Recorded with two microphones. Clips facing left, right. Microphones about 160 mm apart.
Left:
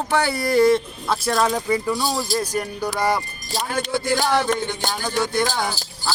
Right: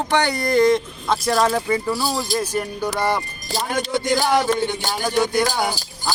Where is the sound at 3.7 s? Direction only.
20° right (ahead or behind).